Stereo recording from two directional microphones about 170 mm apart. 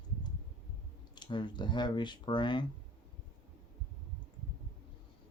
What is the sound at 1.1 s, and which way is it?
Speech, 25° left (ahead or behind).